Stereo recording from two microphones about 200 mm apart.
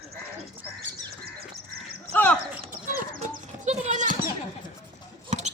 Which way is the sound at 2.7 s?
45° right (ahead or behind).